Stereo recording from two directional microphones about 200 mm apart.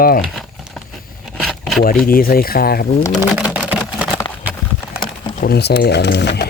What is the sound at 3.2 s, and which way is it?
Speech, 5° right (ahead or behind).